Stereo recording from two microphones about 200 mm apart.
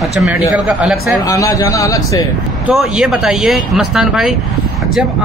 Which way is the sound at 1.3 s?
15° left (ahead or behind).